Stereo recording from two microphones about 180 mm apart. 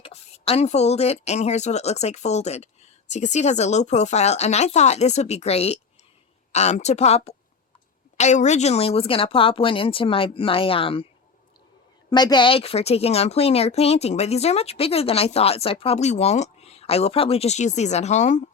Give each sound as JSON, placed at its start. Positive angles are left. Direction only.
{"t": 0.0, "sound": "speech", "side_deg": 35}
{"t": 12.1, "sound": "speech", "side_deg": 25}